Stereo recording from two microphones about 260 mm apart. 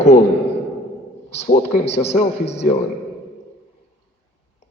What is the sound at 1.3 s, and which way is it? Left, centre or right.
Speech, left.